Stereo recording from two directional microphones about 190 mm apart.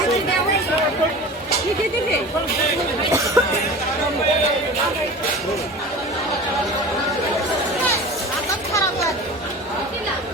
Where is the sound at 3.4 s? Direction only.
15° right (ahead or behind).